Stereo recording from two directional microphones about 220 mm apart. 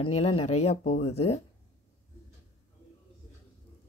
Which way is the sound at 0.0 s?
25° left (ahead or behind).